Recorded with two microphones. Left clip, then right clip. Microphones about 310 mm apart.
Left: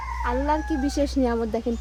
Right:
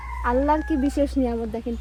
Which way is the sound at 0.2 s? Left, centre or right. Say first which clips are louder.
Right 4 dB; centre.